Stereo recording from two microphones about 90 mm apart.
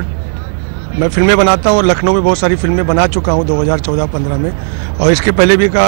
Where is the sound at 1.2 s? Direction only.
5° left (ahead or behind).